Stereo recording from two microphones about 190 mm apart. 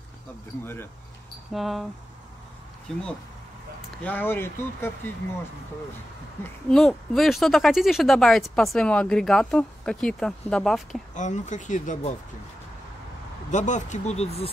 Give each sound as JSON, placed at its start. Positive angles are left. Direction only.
{"t": 1.5, "sound": "speech", "side_deg": 0}
{"t": 2.9, "sound": "speech", "side_deg": 5}
{"t": 6.4, "sound": "speech", "side_deg": 5}
{"t": 11.1, "sound": "speech", "side_deg": 40}
{"t": 13.5, "sound": "speech", "side_deg": 40}